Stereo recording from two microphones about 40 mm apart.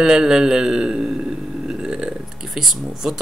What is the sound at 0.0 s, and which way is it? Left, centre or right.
Speech, centre.